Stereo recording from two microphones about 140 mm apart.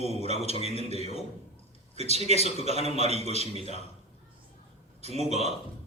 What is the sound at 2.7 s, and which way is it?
Speech, 45° left (ahead or behind).